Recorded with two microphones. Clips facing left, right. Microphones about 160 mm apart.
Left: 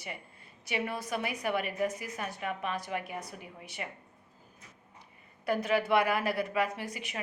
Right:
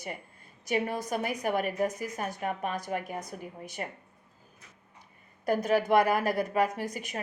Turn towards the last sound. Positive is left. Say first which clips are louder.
# right 4 dB
turn(degrees=-40)  # may be behind; listen again after turning